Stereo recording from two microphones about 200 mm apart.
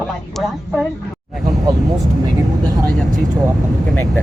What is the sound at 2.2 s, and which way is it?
Vehicle, 20° right (ahead or behind).